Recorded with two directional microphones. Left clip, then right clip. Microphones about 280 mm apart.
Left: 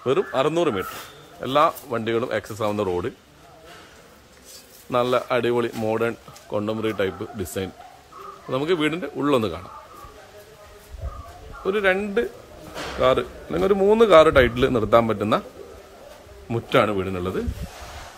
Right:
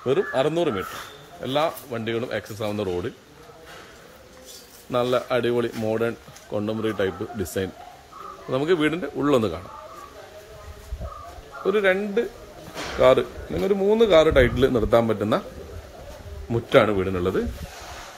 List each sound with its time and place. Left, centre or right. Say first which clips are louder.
0.0 s speech: left 1 dB; centre
4.9 s speech: left 1 dB; centre
11.6 s a man's voice: even; centre
13.6 s speech: left 3 dB; centre
16.4 s speech: right 2 dB; centre